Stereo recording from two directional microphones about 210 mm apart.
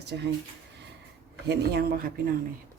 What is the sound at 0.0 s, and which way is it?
Speech, 55° right (ahead or behind).